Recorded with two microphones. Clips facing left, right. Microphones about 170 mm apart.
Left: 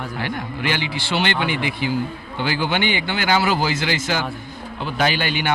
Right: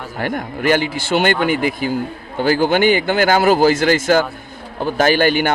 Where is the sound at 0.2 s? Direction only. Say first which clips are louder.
Right 7 dB; 50° right (ahead or behind).